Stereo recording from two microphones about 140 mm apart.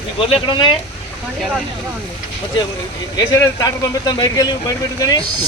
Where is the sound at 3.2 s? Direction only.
30° left (ahead or behind).